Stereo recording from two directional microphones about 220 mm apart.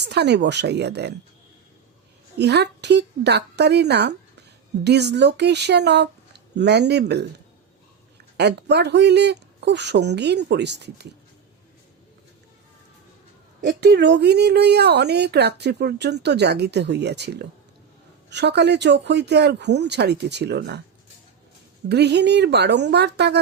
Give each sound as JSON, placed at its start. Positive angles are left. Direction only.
{"t": 0.0, "sound": "speech", "side_deg": -50}
{"t": 2.4, "sound": "speech", "side_deg": -50}
{"t": 13.7, "sound": "speech", "side_deg": -50}
{"t": 21.8, "sound": "speech", "side_deg": -50}